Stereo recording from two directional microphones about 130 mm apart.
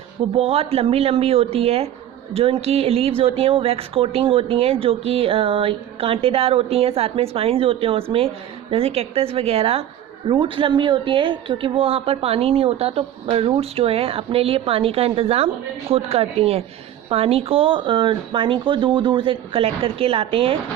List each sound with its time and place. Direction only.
0.3 s speech: 50° right (ahead or behind)